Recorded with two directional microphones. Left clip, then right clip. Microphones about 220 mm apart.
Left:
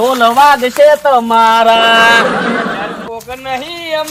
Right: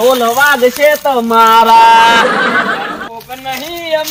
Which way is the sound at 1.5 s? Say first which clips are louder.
Right 6 dB; 10° left (ahead or behind).